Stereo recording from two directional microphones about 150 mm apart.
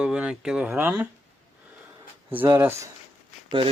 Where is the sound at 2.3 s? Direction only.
15° right (ahead or behind).